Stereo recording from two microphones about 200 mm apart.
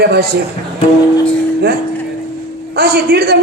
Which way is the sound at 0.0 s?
50° right (ahead or behind).